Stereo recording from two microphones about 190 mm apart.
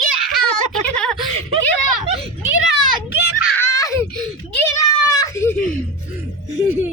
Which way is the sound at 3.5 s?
15° left (ahead or behind).